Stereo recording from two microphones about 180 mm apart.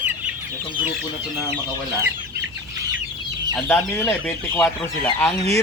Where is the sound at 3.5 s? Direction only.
10° left (ahead or behind).